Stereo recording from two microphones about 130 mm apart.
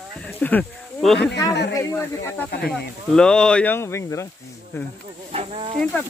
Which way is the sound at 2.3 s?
10° left (ahead or behind).